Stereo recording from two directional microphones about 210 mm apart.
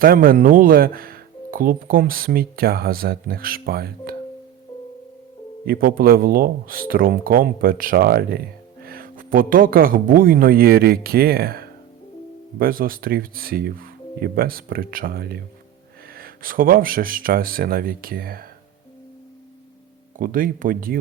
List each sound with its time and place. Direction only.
0.0 s speech: 45° right (ahead or behind)
5.6 s speech: 45° right (ahead or behind)
20.1 s speech: 40° right (ahead or behind)